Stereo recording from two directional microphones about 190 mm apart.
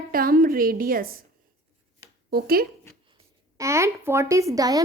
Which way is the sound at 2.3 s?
55° right (ahead or behind).